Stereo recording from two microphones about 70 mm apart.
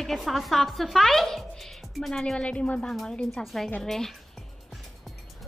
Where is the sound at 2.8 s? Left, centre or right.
Centre.